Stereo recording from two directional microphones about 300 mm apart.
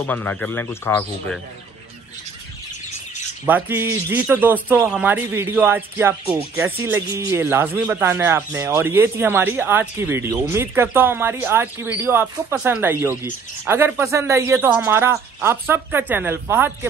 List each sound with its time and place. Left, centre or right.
0.0 s speech: centre
3.4 s a man's voice: centre